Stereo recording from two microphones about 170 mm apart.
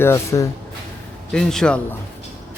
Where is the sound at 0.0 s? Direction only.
15° left (ahead or behind).